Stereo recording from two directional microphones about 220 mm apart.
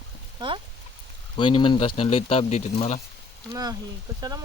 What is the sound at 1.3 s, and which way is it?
Speech, 20° left (ahead or behind).